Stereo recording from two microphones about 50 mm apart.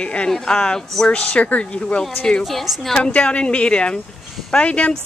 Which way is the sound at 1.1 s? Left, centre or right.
Left.